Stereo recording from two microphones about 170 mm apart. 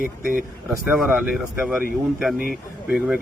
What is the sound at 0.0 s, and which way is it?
Speech, 55° right (ahead or behind).